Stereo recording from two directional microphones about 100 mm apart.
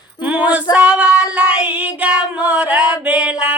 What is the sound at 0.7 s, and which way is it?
Child singing, 15° right (ahead or behind).